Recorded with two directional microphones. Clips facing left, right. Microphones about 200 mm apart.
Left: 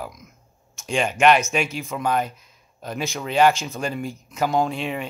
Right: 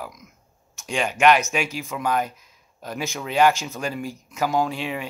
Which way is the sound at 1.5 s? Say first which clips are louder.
Left 2 dB; 5° right (ahead or behind).